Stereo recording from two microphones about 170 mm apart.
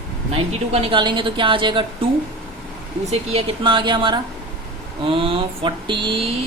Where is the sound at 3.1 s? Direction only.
35° right (ahead or behind).